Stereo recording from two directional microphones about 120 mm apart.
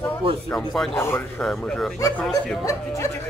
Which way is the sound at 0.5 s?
5° left (ahead or behind).